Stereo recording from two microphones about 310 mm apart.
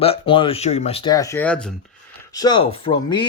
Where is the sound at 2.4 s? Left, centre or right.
Centre.